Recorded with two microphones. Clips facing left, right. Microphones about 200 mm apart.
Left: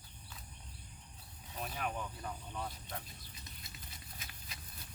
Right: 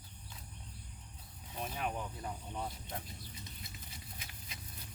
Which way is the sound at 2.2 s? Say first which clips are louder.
Right 1 dB; 20° right (ahead or behind).